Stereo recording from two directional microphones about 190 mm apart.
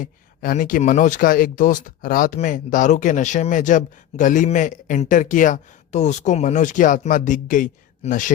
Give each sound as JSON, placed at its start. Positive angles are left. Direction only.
{"t": 0.0, "sound": "speech", "side_deg": 45}